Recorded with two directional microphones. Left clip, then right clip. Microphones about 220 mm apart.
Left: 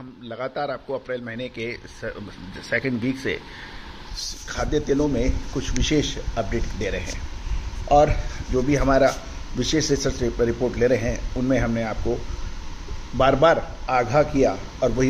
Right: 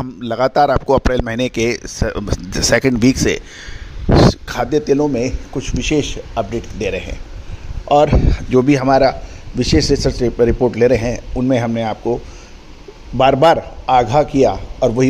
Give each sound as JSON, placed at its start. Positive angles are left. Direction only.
{"t": 0.2, "sound": "speech", "side_deg": -55}
{"t": 4.1, "sound": "a man's voice", "side_deg": -40}
{"t": 13.2, "sound": "speech", "side_deg": -35}